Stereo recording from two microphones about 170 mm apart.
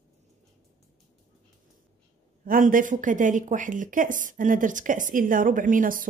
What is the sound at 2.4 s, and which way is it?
Speech, 55° right (ahead or behind).